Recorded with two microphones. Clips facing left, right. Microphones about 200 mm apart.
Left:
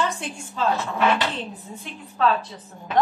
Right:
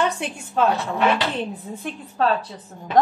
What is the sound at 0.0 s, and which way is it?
Speech, 60° right (ahead or behind).